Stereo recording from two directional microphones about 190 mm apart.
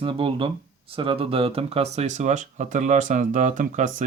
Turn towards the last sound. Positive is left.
turn(degrees=-40)  # may be behind; listen again after turning